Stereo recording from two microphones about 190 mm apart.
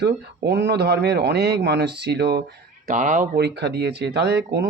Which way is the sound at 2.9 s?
40° right (ahead or behind).